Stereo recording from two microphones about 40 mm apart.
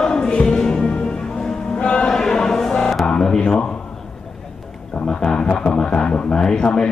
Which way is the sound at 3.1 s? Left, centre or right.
Centre.